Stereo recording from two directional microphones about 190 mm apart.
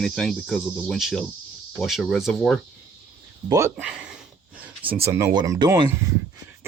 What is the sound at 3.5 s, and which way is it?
Speech, 15° right (ahead or behind).